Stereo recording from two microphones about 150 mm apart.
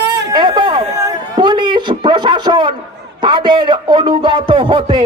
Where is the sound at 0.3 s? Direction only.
30° right (ahead or behind).